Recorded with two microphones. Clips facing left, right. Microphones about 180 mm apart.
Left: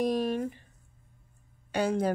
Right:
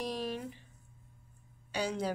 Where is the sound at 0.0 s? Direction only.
50° left (ahead or behind).